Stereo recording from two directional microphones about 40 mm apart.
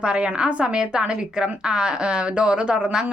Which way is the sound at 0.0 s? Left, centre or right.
Right.